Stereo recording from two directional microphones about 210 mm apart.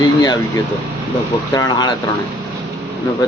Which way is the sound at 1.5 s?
20° left (ahead or behind).